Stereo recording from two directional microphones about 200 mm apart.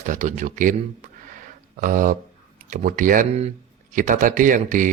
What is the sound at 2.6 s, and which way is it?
Speech, 40° right (ahead or behind).